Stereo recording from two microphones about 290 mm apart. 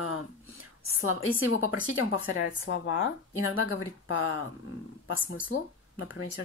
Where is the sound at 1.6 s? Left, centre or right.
Left.